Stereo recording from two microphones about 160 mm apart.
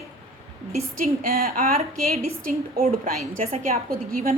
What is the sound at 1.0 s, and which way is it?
A woman's voice, 65° right (ahead or behind).